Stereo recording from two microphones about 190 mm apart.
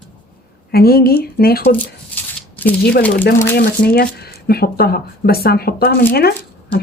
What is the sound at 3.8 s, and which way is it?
Speech, 55° left (ahead or behind).